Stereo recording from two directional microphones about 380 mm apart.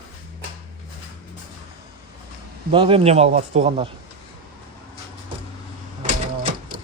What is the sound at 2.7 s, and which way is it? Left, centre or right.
Speech, centre.